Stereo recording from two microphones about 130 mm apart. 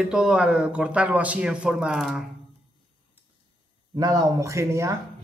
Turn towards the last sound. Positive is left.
turn(degrees=-20)  # may be behind; listen again after turning